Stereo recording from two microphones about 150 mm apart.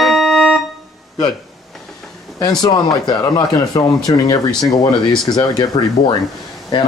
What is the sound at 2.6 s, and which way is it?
A man's voice, 25° left (ahead or behind).